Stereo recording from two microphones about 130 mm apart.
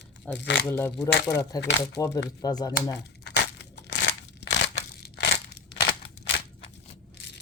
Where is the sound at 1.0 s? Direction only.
20° left (ahead or behind).